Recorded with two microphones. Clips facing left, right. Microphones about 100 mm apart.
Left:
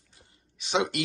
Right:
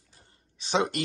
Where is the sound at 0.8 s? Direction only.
40° right (ahead or behind).